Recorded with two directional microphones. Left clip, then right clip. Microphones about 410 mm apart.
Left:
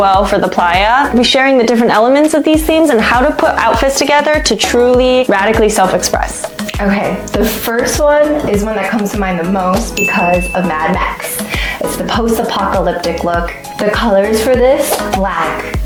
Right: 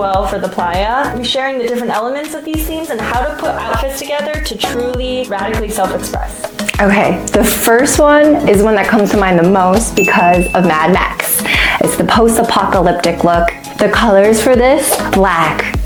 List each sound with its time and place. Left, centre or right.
0.6 s speech: left
4.1 s speech: left
6.9 s speech: right
10.1 s speech: right
13.9 s speech: right